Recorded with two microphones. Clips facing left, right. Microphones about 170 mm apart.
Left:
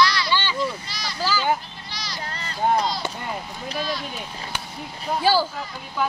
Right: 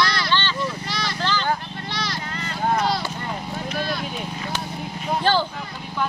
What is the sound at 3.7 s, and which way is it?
Speech, 60° right (ahead or behind).